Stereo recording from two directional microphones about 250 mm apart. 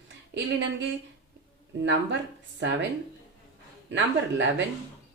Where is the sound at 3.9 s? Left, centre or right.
Right.